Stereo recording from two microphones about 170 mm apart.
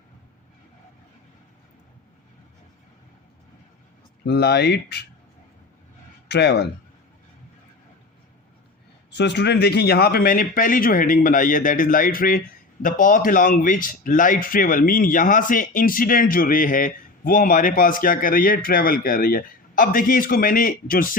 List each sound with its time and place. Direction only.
4.3 s speech: 70° left (ahead or behind)
6.2 s speech: 80° left
9.0 s a man's voice: 85° left; by 21.2 s 55° left (ahead or behind)